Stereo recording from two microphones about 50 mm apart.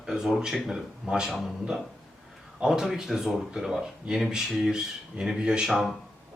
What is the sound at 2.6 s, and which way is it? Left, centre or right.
Speech, centre.